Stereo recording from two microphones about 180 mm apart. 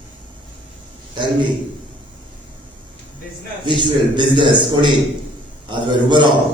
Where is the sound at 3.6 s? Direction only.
25° right (ahead or behind).